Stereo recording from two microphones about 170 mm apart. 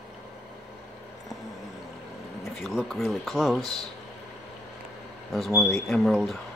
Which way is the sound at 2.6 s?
Centre (ahead or behind).